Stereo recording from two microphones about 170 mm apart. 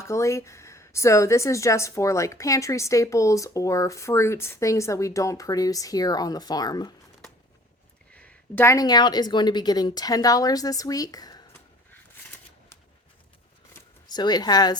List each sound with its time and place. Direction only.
0.0 s a woman's voice: 15° left (ahead or behind)
8.1 s speech: 5° left (ahead or behind); by 11.4 s 25° left (ahead or behind)
13.7 s speech: 25° left (ahead or behind)